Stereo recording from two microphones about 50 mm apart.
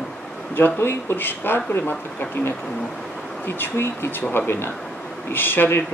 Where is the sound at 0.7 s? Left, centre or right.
Left.